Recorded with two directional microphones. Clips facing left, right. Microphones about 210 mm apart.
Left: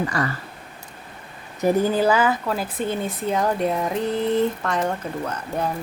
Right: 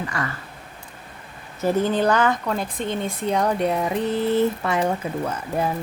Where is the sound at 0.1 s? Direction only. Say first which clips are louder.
Left 2 dB; 35° left (ahead or behind).